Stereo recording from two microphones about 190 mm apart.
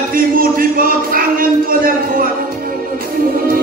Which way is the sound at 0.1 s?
50° right (ahead or behind).